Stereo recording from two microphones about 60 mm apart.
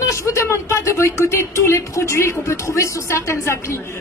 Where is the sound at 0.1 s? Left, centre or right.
Left.